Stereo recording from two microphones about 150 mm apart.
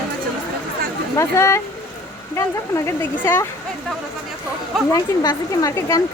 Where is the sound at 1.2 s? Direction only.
20° left (ahead or behind).